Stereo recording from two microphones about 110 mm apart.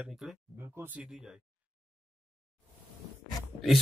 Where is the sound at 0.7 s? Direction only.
15° right (ahead or behind).